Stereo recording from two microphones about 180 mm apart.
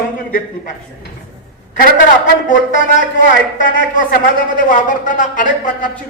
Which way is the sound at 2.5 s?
45° left (ahead or behind).